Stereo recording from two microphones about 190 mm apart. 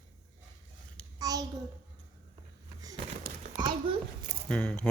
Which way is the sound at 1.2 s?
20° right (ahead or behind).